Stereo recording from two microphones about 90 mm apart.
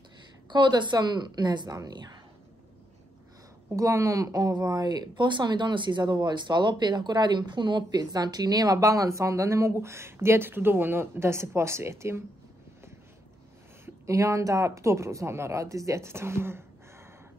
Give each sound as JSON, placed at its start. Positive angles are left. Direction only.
{"t": 0.5, "sound": "a woman's voice", "side_deg": -55}
{"t": 3.7, "sound": "speech", "side_deg": -35}
{"t": 13.8, "sound": "speech", "side_deg": -35}